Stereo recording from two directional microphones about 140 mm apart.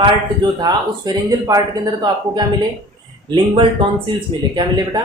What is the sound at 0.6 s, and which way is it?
Speech, 25° right (ahead or behind).